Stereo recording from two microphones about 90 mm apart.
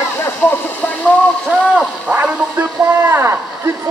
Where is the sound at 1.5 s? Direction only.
15° right (ahead or behind).